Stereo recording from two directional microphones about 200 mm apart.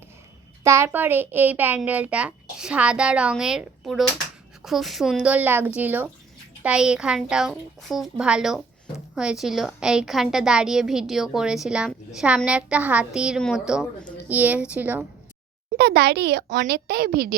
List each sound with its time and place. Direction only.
0.6 s a child's voice: 15° right (ahead or behind)
15.8 s a child's voice: 55° right (ahead or behind)